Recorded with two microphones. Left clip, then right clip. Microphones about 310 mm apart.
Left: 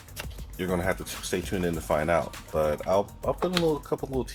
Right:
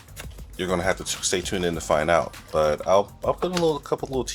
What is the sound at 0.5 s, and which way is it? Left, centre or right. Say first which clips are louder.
Speech: right 4 dB; right.